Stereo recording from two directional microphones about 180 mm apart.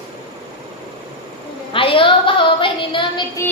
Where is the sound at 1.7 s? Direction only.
30° left (ahead or behind).